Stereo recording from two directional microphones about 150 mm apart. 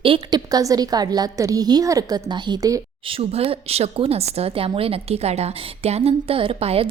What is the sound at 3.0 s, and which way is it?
A woman's voice, 40° right (ahead or behind).